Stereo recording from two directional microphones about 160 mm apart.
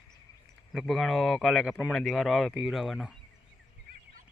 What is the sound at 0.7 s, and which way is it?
Speech, centre (ahead or behind).